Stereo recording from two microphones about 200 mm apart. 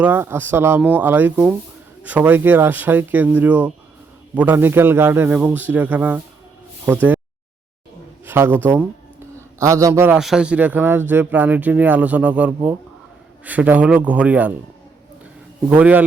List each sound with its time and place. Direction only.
0.0 s speech: 10° right (ahead or behind)
8.2 s a man's voice: 10° right (ahead or behind)
10.2 s speech: 5° right (ahead or behind)
15.7 s speech: 10° right (ahead or behind)